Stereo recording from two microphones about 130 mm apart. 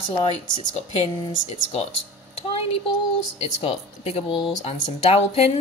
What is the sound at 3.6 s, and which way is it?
Speech, 45° left (ahead or behind).